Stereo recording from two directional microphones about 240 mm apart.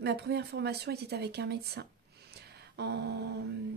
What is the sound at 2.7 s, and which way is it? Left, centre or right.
Mantra, right.